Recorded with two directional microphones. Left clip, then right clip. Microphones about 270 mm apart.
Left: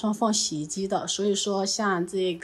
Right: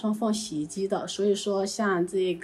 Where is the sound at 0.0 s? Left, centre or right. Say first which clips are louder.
Left 4 dB; centre.